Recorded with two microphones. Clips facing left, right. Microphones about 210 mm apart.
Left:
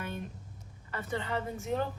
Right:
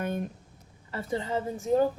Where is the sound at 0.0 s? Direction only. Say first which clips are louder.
Right 8 dB; 45° right (ahead or behind).